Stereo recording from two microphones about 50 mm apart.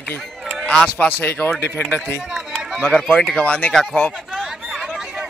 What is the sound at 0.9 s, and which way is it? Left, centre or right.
Speech, left.